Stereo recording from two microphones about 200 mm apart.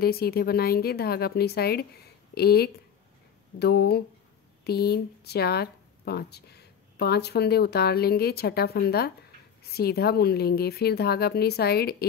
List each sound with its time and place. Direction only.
0.0 s speech: 50° left (ahead or behind)